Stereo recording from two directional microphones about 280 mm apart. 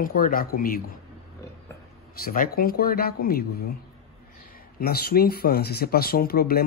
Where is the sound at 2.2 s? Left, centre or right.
Left.